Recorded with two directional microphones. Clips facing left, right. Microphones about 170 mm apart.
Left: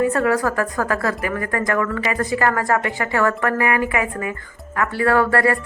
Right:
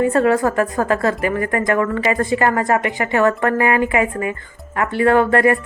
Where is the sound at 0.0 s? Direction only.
25° right (ahead or behind).